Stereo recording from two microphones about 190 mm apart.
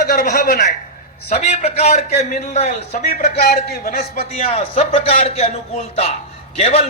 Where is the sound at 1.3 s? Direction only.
35° left (ahead or behind).